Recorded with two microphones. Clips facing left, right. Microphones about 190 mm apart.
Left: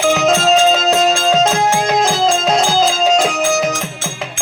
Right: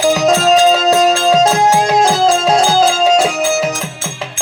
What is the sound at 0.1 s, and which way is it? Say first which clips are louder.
Music: right 1 dB; 35° right (ahead or behind).